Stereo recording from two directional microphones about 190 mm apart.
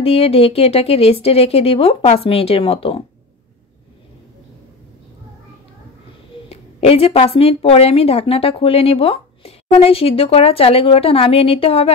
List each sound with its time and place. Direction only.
0.0 s a woman's voice: 30° left (ahead or behind)
6.5 s a woman's voice: 30° left (ahead or behind)